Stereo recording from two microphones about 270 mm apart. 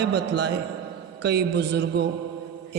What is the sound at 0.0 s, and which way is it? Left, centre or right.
A man's voice, right.